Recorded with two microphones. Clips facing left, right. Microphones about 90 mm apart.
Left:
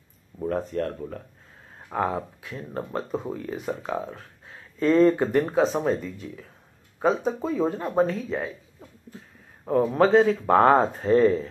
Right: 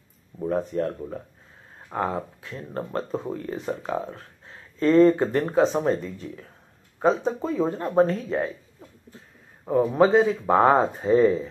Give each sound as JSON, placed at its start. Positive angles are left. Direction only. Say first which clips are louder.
{"t": 0.6, "sound": "speech", "louder": "right 3 dB", "side_deg": -15}
{"t": 1.9, "sound": "speech", "louder": "left 1 dB", "side_deg": 0}
{"t": 5.6, "sound": "speech", "louder": "right 1 dB", "side_deg": 0}
{"t": 9.7, "sound": "speech", "louder": "right 1 dB", "side_deg": -5}